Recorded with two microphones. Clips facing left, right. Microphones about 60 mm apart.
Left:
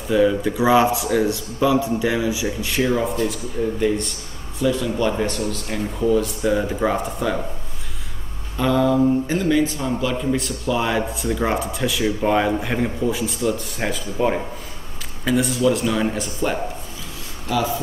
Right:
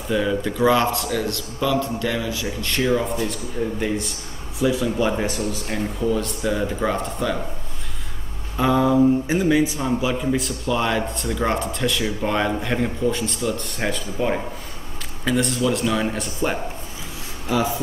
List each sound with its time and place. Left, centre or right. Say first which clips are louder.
0.1 s a man's voice: left 4 dB; centre
6.0 s a man's voice: left 5 dB; centre
8.5 s a man's voice: even; centre
15.2 s a man's voice: left 2 dB; centre
17.5 s speech: even; right